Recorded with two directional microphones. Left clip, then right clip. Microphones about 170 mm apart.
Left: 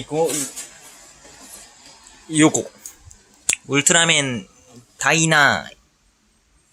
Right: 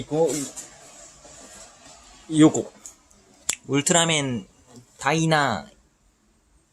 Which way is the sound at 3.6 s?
5° right (ahead or behind).